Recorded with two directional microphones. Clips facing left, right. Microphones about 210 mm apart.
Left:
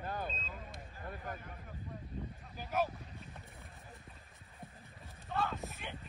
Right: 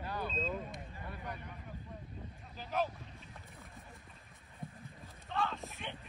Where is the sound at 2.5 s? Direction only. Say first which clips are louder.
Left 1 dB; 10° left (ahead or behind).